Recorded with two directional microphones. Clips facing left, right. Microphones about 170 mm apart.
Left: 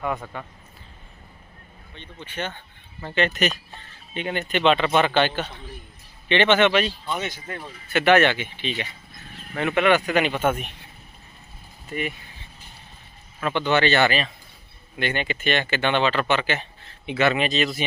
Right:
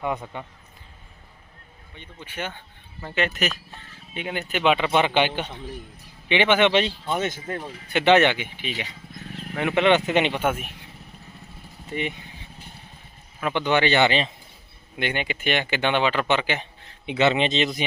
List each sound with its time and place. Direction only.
0.0 s speech: 20° right (ahead or behind)
2.0 s speech: 10° right (ahead or behind)
7.1 s speech: 50° right (ahead or behind)
7.6 s speech: 20° right (ahead or behind)
10.4 s speech: 5° right (ahead or behind)
11.9 s speech: 20° right (ahead or behind)
13.4 s speech: 15° right (ahead or behind)